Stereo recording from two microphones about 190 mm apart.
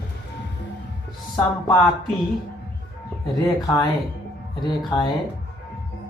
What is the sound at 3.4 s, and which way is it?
Speech, 20° left (ahead or behind).